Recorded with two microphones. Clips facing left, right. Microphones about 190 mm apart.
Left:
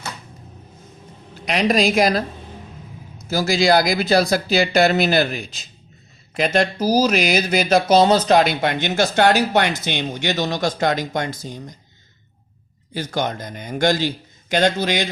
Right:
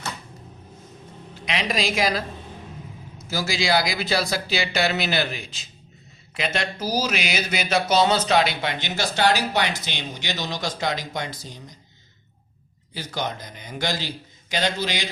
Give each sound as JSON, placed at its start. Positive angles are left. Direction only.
{"t": 1.5, "sound": "speech", "side_deg": 45}
{"t": 3.2, "sound": "speech", "side_deg": 45}
{"t": 12.9, "sound": "speech", "side_deg": 50}